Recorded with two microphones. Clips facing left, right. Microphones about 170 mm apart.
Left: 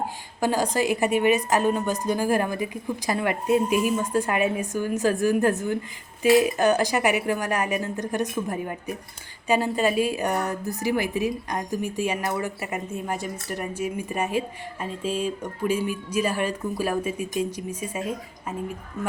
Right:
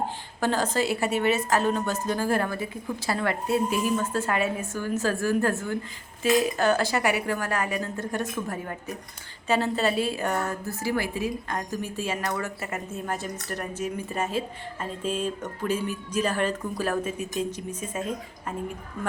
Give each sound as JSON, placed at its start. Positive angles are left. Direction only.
{"t": 0.3, "sound": "a woman's voice", "side_deg": 10}